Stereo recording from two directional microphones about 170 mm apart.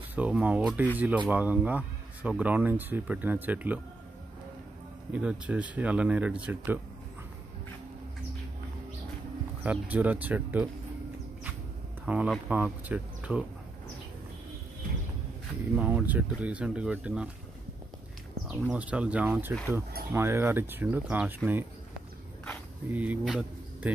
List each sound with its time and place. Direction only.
0.1 s speech: 10° right (ahead or behind)
5.1 s speech: 5° right (ahead or behind)
9.6 s speech: 10° right (ahead or behind)
12.1 s speech: 5° right (ahead or behind)
15.7 s speech: 10° right (ahead or behind)
18.5 s speech: 5° right (ahead or behind)
22.8 s speech: 10° right (ahead or behind)